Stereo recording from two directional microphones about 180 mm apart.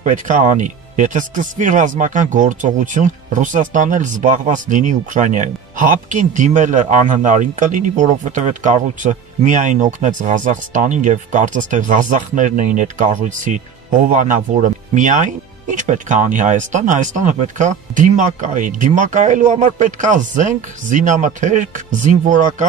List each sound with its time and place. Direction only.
0.0 s speech: 45° right (ahead or behind)